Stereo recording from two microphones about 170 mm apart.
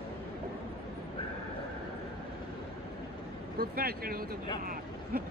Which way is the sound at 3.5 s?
60° right (ahead or behind).